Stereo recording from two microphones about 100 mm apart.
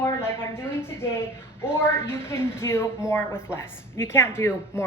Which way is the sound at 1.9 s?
25° left (ahead or behind).